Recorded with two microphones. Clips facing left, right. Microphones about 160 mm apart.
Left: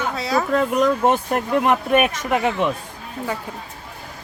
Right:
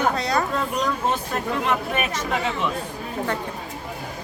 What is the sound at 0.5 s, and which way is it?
Speech, 55° left (ahead or behind).